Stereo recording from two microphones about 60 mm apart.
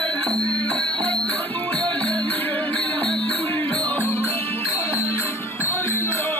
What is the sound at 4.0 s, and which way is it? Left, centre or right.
Music, left.